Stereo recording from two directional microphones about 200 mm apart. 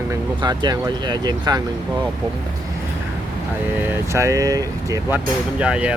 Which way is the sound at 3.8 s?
10° right (ahead or behind).